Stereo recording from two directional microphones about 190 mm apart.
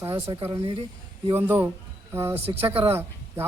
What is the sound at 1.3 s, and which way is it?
Speech, 10° right (ahead or behind).